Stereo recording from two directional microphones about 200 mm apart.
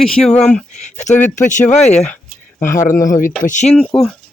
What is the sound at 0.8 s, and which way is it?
Speech, 35° left (ahead or behind).